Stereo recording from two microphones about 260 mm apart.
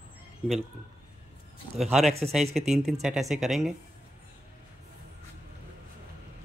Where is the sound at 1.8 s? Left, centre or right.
Centre.